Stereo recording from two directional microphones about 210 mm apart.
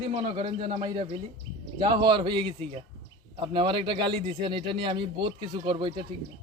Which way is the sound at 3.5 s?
25° right (ahead or behind).